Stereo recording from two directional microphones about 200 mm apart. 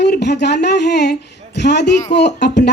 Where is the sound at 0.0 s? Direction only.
55° left (ahead or behind).